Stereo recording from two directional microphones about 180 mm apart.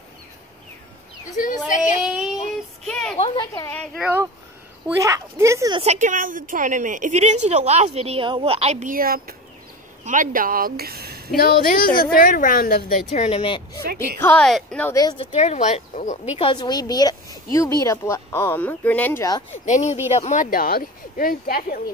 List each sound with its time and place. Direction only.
1.3 s a sound: 45° left (ahead or behind)
2.0 s child singing: 5° right (ahead or behind)
2.8 s a sound: centre (ahead or behind)
3.2 s a woman's voice: 25° left (ahead or behind)
3.7 s speech: 5° left (ahead or behind)
4.0 s speech: 15° right (ahead or behind)
5.8 s a woman's voice: 40° right (ahead or behind); by 11.2 s 60° right (ahead or behind)
11.3 s a woman's voice: 55° left (ahead or behind)
13.1 s speech: 35° left (ahead or behind)
14.2 s speech: 5° left (ahead or behind)
15.0 s speech: 20° left (ahead or behind)
15.3 s speech: 35° left (ahead or behind); by 19.2 s 10° left (ahead or behind)
19.5 s a woman's voice: 40° left (ahead or behind)